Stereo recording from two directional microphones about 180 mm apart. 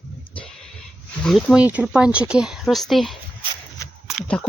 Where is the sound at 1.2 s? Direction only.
Centre (ahead or behind).